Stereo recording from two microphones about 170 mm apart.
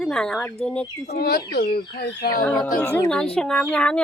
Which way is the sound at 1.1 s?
65° left (ahead or behind).